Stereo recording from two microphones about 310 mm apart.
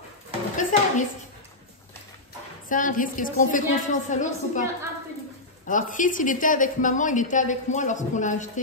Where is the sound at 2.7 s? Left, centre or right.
Left.